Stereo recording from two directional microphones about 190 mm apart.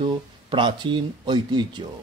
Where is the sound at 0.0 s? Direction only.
25° right (ahead or behind).